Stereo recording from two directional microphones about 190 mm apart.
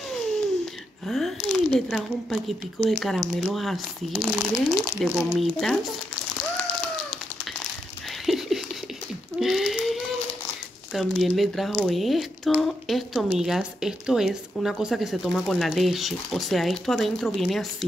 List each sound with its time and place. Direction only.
1.0 s speech: centre (ahead or behind)
8.3 s a sound: centre (ahead or behind)
10.9 s speech: centre (ahead or behind)